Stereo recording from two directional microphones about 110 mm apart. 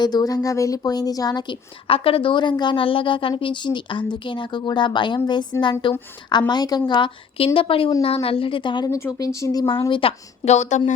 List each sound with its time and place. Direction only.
0.0 s speech: 40° left (ahead or behind)
1.9 s a woman's voice: 55° left (ahead or behind)
8.9 s speech: 30° left (ahead or behind)
9.9 s speech: 60° left (ahead or behind); by 10.9 s 90° left